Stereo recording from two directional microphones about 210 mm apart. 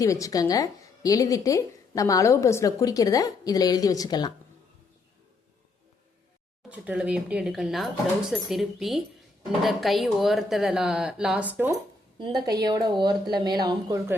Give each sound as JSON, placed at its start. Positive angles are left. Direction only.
{"t": 0.0, "sound": "a woman's voice", "side_deg": 15}
{"t": 6.7, "sound": "speech", "side_deg": -5}
{"t": 12.6, "sound": "speech", "side_deg": -20}